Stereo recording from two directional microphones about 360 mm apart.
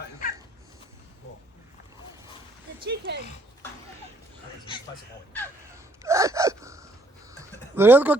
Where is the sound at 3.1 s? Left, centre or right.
Right.